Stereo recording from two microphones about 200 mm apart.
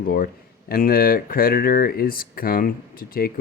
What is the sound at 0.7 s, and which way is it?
Speech, 45° left (ahead or behind).